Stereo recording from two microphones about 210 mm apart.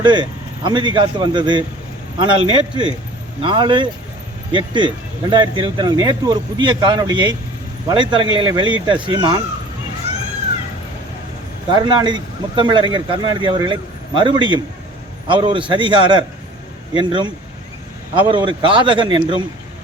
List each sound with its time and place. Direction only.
0.0 s speech: 20° right (ahead or behind)
11.7 s speech: 20° right (ahead or behind)